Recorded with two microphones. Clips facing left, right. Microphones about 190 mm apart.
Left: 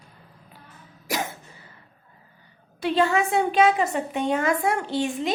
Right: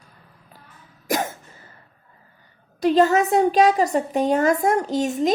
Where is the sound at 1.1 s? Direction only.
45° right (ahead or behind).